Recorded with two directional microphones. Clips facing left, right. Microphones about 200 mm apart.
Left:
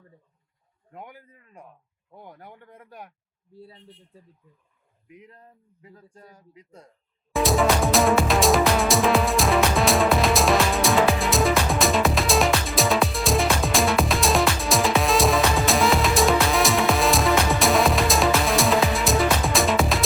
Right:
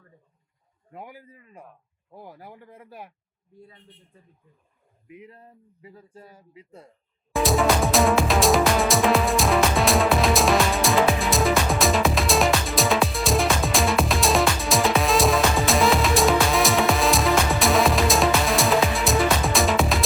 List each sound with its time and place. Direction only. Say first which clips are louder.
0.9 s speech: right 2 dB; 5° right (ahead or behind)
3.5 s speech: left 3 dB; 35° left (ahead or behind)
5.0 s speech: right 3 dB; 5° right (ahead or behind)
7.3 s music: even; centre (ahead or behind)